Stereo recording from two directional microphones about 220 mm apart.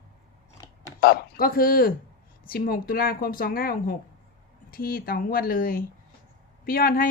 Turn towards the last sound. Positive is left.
turn(degrees=40)  # may be behind; listen again after turning